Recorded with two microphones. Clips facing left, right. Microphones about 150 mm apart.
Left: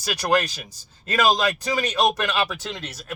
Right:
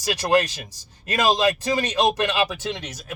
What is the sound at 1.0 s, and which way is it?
Speech, 20° right (ahead or behind).